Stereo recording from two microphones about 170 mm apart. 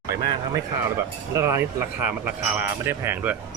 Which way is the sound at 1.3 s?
15° right (ahead or behind).